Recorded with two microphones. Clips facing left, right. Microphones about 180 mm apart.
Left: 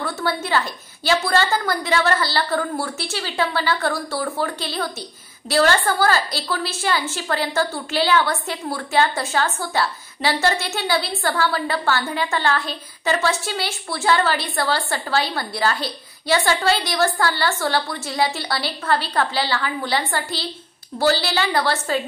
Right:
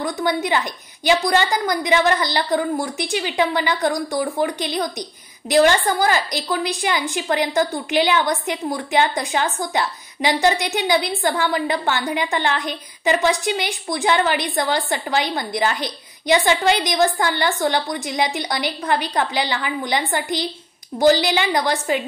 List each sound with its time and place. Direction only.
0.0 s a woman's voice: 15° right (ahead or behind)